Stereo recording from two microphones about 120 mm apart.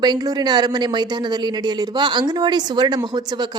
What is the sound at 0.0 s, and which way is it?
A woman's voice, 35° right (ahead or behind).